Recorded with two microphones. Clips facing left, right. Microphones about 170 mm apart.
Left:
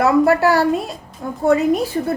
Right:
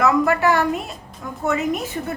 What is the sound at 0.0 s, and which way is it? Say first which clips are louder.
A woman's voice: left 4 dB; 35° left (ahead or behind).